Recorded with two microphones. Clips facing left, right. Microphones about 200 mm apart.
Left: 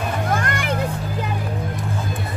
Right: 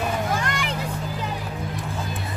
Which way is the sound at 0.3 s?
55° left (ahead or behind).